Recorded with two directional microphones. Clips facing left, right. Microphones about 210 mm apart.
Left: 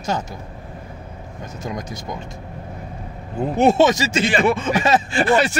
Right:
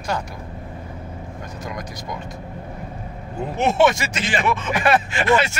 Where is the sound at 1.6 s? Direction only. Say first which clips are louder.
Left 4 dB; 25° left (ahead or behind).